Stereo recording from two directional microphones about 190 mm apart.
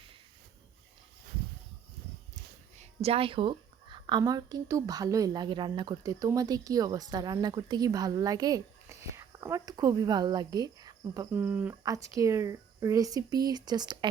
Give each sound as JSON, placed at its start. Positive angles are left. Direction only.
{"t": 2.3, "sound": "speech", "side_deg": -35}